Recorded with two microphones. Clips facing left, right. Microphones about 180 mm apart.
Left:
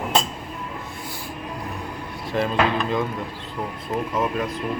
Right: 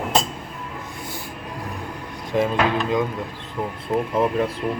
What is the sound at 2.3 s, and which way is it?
Speech, 15° right (ahead or behind).